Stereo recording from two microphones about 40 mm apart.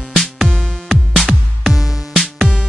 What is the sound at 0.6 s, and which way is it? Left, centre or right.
Music, centre.